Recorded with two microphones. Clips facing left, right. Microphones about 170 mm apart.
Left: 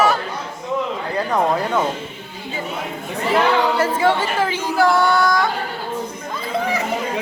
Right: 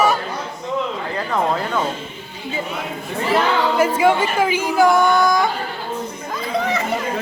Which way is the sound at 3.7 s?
15° right (ahead or behind).